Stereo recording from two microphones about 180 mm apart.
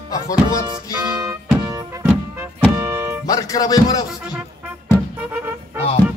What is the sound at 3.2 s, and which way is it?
Music, 20° left (ahead or behind).